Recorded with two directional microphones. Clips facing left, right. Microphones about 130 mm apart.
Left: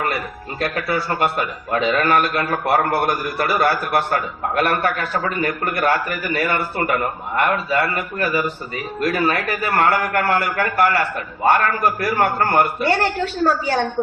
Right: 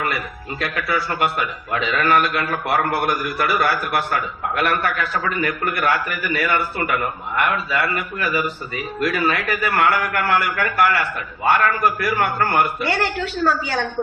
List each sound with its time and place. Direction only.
0.6 s a man's voice: 40° left (ahead or behind)